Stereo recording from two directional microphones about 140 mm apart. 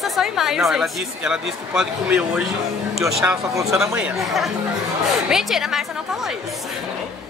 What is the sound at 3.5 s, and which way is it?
Speech, 20° right (ahead or behind).